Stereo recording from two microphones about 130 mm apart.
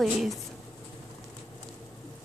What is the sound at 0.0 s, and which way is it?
Speech, centre (ahead or behind).